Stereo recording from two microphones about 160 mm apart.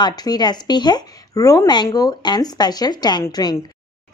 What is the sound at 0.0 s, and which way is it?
Speech, 25° left (ahead or behind).